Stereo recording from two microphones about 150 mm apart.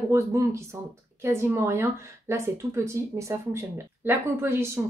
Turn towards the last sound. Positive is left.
turn(degrees=-15)  # may be behind; listen again after turning